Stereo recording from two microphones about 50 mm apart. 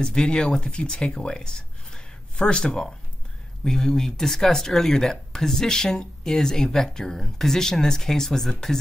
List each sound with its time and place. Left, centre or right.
0.0 s speech: centre